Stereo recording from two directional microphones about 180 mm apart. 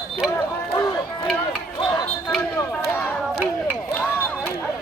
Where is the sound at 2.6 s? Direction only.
15° left (ahead or behind).